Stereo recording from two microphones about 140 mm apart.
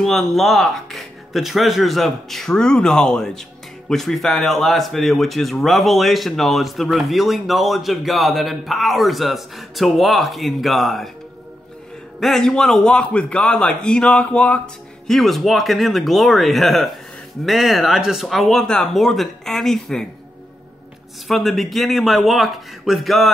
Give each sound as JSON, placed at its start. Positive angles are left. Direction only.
{"t": 0.0, "sound": "speech", "side_deg": 0}
{"t": 12.2, "sound": "speech", "side_deg": 5}
{"t": 21.3, "sound": "speech", "side_deg": 0}